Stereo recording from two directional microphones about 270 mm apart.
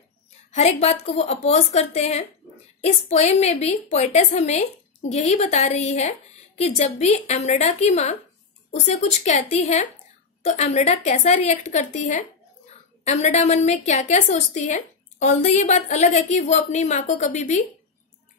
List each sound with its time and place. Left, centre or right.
0.5 s a woman's voice: left